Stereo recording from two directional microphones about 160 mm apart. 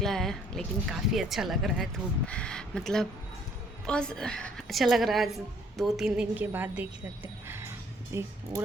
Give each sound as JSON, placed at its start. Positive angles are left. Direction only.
{"t": 0.0, "sound": "a woman's voice", "side_deg": 5}